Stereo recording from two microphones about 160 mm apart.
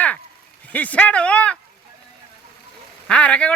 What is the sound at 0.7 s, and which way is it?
Speech, 10° left (ahead or behind).